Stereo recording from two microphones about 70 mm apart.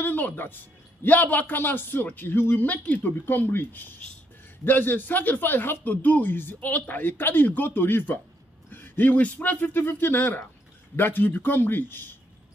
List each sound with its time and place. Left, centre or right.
0.0 s a sound: left
1.0 s speech: left
2.5 s speech: left